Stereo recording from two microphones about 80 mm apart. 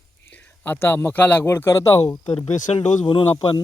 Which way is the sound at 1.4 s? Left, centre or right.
Left.